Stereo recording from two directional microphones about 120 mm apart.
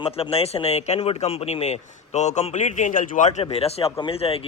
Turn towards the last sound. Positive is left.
turn(degrees=55)  # may be behind; listen again after turning